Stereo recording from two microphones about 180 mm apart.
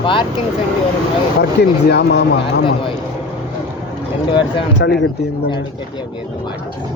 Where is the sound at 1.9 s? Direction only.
70° left (ahead or behind).